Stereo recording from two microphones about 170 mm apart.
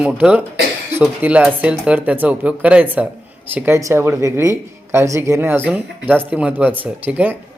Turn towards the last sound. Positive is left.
turn(degrees=-10)  # may be behind; listen again after turning